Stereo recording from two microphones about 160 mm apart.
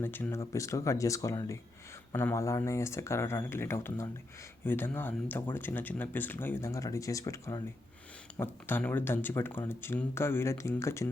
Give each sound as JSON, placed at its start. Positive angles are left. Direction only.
{"t": 0.0, "sound": "speech", "side_deg": 15}